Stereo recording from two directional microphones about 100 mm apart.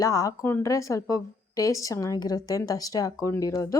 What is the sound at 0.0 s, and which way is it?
A woman's voice, 35° left (ahead or behind).